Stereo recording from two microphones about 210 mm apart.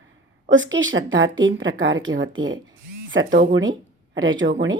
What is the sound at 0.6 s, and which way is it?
Speech, 65° right (ahead or behind).